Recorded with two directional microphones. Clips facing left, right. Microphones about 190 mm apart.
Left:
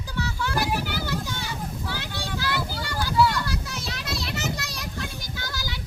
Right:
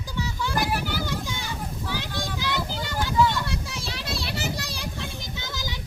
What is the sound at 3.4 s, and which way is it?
Children playing, 25° right (ahead or behind).